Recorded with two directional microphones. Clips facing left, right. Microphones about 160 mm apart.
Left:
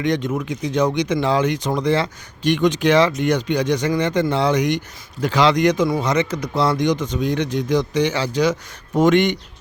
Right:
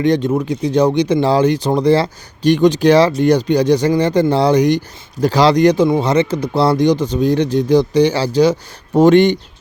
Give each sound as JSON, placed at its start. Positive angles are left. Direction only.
{"t": 0.0, "sound": "speech", "side_deg": -35}